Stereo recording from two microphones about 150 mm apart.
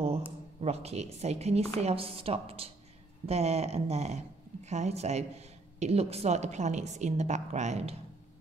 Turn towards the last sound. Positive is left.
turn(degrees=-50)  # may be behind; listen again after turning